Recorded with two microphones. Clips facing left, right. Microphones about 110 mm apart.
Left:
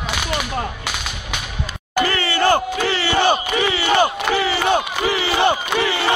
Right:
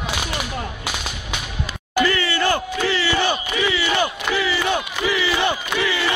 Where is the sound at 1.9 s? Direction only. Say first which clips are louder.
Even; 60° left (ahead or behind).